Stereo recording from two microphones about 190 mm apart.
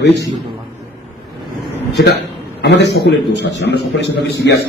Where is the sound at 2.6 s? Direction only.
60° left (ahead or behind).